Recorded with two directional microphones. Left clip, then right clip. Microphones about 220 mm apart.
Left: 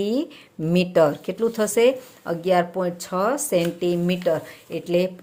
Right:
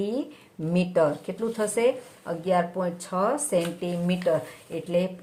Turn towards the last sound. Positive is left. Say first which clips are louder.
# left 4 dB
turn(degrees=40)  # may be behind; listen again after turning